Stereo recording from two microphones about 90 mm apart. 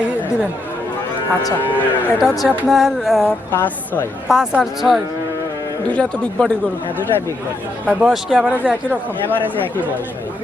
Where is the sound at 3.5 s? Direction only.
25° left (ahead or behind).